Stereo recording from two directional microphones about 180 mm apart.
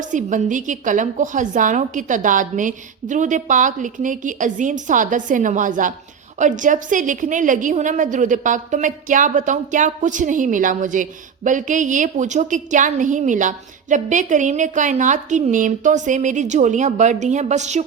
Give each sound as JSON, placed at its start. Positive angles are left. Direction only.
{"t": 0.0, "sound": "a woman's voice", "side_deg": -45}